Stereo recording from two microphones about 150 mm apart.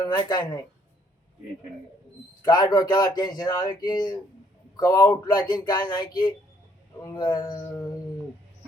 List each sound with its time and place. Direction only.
0.0 s speech: 30° left (ahead or behind)
2.4 s speech: 30° left (ahead or behind)